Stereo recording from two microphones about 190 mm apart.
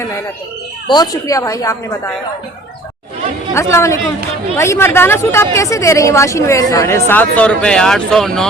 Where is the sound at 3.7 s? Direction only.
15° left (ahead or behind).